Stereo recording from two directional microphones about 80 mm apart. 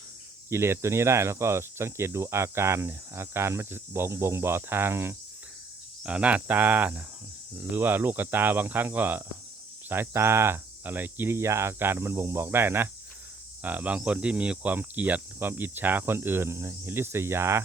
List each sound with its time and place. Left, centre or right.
0.5 s speech: right
6.0 s speech: centre; by 17.6 s right